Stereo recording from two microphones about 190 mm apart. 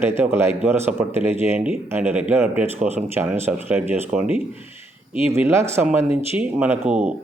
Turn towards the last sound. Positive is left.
turn(degrees=-5)  # may be behind; listen again after turning